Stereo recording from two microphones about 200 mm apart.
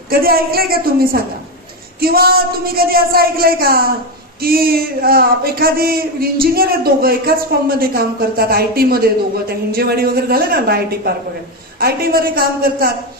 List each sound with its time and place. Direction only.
0.1 s speech: 50° right (ahead or behind)